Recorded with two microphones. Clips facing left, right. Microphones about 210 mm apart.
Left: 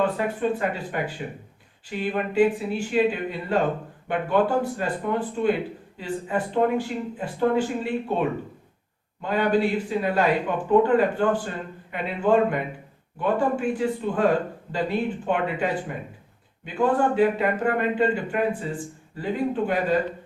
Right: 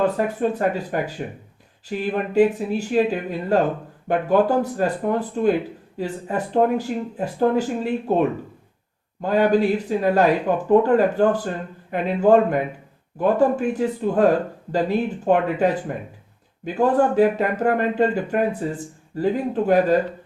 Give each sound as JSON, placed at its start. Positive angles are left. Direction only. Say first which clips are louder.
{"t": 0.0, "sound": "a man's voice", "louder": "right 3 dB", "side_deg": -40}
{"t": 9.2, "sound": "a man's voice", "louder": "right 4 dB", "side_deg": -40}